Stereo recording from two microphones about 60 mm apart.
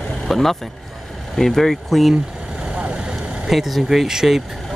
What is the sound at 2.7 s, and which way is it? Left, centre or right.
Vehicle, centre.